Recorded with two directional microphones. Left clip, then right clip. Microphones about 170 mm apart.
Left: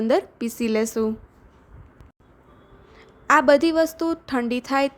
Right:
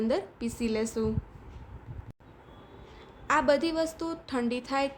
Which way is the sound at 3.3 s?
50° left (ahead or behind).